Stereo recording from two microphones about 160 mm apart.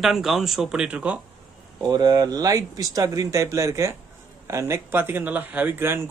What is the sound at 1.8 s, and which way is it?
Speech, 25° right (ahead or behind).